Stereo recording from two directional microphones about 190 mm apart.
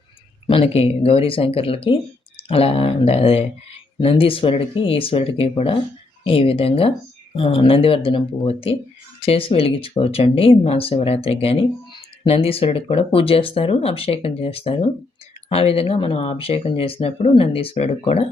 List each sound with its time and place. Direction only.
0.4 s speech: 30° left (ahead or behind)